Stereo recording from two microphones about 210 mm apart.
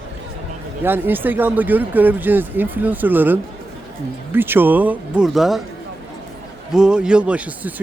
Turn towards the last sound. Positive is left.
turn(degrees=-5)  # may be behind; listen again after turning